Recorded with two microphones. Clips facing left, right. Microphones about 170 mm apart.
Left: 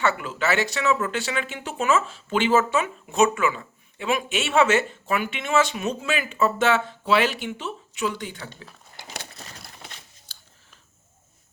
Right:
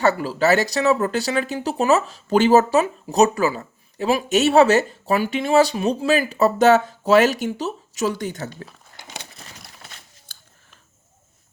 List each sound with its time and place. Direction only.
0.0 s speech: 35° right (ahead or behind)
10.3 s biting: 50° right (ahead or behind)